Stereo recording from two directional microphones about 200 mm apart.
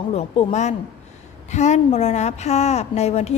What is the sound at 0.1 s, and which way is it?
A woman's voice, 35° left (ahead or behind).